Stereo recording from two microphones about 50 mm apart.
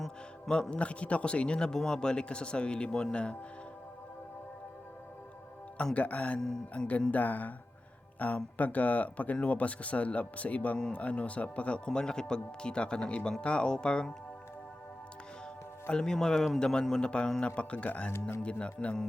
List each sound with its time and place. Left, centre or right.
0.5 s a man's voice: left
5.7 s a man's voice: left
11.9 s speech: centre
15.9 s a man's voice: centre